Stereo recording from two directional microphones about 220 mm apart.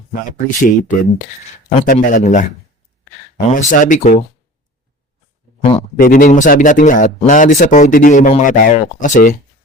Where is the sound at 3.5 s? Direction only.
35° left (ahead or behind).